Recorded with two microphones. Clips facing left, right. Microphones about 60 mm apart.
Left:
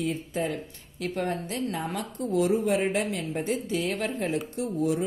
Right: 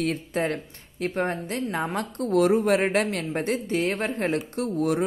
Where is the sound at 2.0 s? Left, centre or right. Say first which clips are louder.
Right 5 dB; right.